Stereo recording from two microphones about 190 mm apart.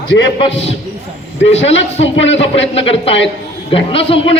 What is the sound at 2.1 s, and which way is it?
A man's voice, 35° left (ahead or behind).